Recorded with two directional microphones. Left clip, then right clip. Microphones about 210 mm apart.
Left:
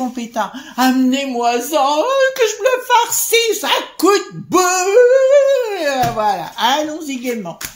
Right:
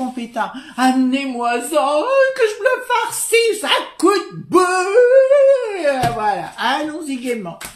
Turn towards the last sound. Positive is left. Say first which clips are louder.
# left 1 dB
turn(degrees=30)  # may be behind; listen again after turning